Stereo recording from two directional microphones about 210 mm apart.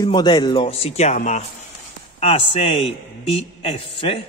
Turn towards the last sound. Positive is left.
turn(degrees=25)  # may be behind; listen again after turning